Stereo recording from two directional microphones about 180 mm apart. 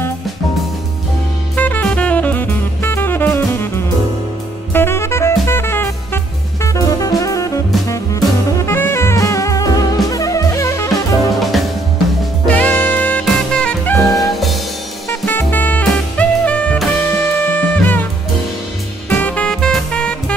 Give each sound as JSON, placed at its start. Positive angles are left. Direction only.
{"t": 1.6, "sound": "jazz", "side_deg": 10}
{"t": 4.7, "sound": "music", "side_deg": 15}
{"t": 10.9, "sound": "drum kit", "side_deg": 0}
{"t": 12.4, "sound": "music", "side_deg": 10}
{"t": 15.2, "sound": "music", "side_deg": 10}
{"t": 19.0, "sound": "music", "side_deg": 10}